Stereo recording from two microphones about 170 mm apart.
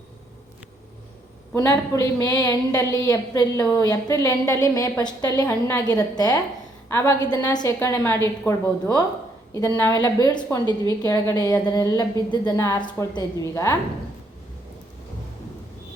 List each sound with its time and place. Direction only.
1.5 s a woman's voice: 20° left (ahead or behind)